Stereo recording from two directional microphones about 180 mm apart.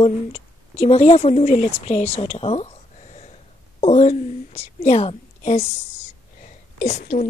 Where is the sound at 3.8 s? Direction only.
40° left (ahead or behind).